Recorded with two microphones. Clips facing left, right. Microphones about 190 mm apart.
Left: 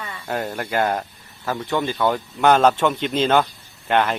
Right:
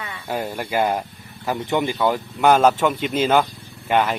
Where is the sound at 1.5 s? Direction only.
20° right (ahead or behind).